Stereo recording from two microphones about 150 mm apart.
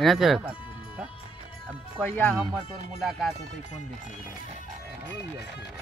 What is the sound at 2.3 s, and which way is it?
Speech, 5° right (ahead or behind).